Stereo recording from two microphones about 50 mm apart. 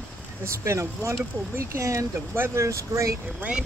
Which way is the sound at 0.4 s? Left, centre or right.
Right.